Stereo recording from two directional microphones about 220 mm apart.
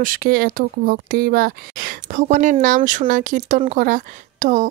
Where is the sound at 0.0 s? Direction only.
40° right (ahead or behind).